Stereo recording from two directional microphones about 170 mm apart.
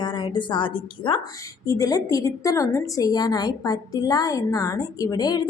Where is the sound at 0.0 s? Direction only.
25° left (ahead or behind).